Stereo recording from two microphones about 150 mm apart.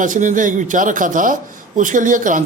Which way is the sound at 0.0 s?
60° right (ahead or behind).